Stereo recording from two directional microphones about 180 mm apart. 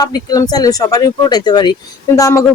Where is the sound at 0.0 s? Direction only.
20° left (ahead or behind).